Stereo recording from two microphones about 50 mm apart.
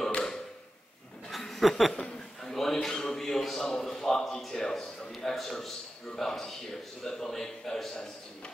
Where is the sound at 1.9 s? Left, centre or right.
Centre.